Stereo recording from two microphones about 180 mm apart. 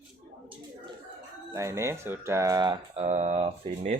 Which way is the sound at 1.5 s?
15° right (ahead or behind).